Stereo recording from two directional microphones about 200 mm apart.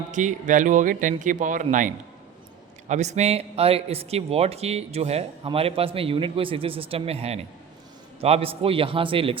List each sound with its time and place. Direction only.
0.1 s speech: 40° right (ahead or behind)
2.9 s a man's voice: 35° right (ahead or behind)